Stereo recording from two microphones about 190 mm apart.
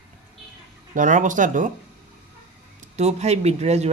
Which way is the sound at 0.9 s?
40° right (ahead or behind).